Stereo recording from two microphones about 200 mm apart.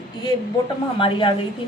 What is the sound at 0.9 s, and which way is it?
Speech, 25° left (ahead or behind).